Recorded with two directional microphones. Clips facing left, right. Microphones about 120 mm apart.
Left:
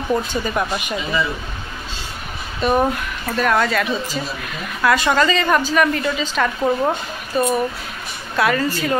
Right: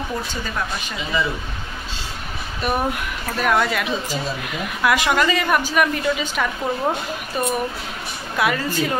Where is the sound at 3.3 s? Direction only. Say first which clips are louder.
Left 2 dB; 15° right (ahead or behind).